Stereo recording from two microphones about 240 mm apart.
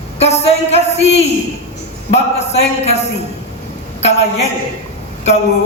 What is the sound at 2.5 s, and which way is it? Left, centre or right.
Music, left.